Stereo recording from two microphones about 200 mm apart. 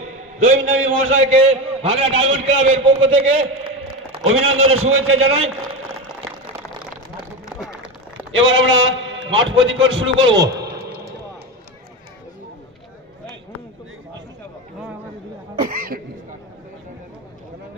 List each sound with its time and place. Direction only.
0.4 s a man's voice: 45° right (ahead or behind)
1.3 s a man's voice: 30° right (ahead or behind)
4.7 s a man's voice: 90° right
7.2 s a sound: 5° right (ahead or behind)
8.3 s a man's voice: 70° right (ahead or behind)
10.1 s a man's voice: 20° right (ahead or behind)
15.6 s cough: 45° right (ahead or behind)